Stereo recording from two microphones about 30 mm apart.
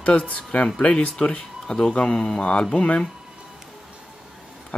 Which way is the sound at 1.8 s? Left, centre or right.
Left.